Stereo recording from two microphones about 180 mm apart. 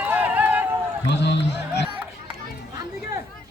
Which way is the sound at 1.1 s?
75° left (ahead or behind).